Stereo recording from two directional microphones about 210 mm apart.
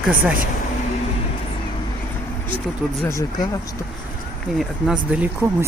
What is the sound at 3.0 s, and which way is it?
Speech, 15° left (ahead or behind).